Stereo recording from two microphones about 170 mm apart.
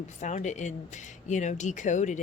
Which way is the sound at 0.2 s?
45° left (ahead or behind).